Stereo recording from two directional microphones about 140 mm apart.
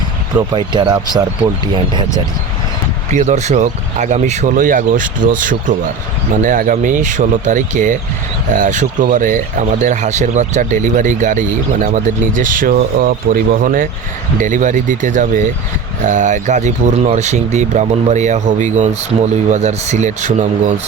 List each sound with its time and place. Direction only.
0.3 s speech: 35° right (ahead or behind)
3.1 s speech: 55° right (ahead or behind); by 13.8 s 80° right
14.4 s speech: 65° right (ahead or behind)